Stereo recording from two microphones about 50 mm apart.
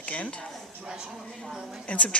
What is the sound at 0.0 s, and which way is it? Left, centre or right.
Speech, left.